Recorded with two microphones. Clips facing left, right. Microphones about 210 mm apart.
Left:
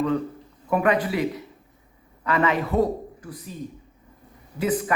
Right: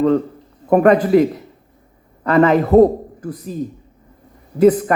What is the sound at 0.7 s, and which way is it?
A man's voice, 45° right (ahead or behind).